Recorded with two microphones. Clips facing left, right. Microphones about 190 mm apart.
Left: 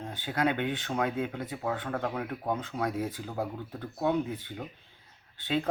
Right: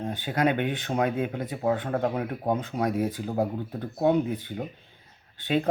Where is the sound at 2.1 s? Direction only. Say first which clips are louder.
Right 5 dB; 20° right (ahead or behind).